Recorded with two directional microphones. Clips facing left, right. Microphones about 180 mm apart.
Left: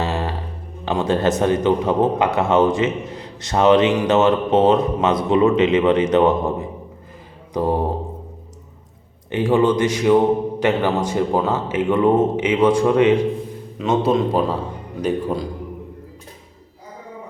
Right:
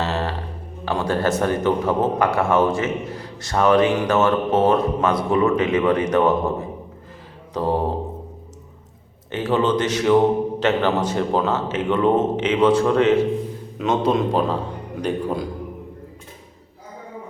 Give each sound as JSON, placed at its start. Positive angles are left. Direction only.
{"t": 0.0, "sound": "music", "side_deg": 15}
{"t": 0.9, "sound": "a man's voice", "side_deg": 20}
{"t": 9.3, "sound": "a man's voice", "side_deg": 10}
{"t": 13.7, "sound": "a man's voice", "side_deg": 5}